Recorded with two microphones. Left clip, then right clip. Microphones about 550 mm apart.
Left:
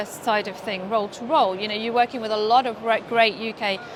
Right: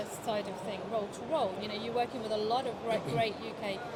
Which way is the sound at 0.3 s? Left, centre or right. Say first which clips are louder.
Left 12 dB; left.